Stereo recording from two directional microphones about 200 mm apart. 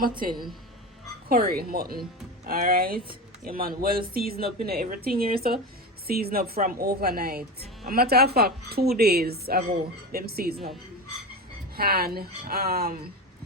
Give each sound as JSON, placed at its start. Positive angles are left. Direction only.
{"t": 1.3, "sound": "speech", "side_deg": -50}
{"t": 11.8, "sound": "speech", "side_deg": -50}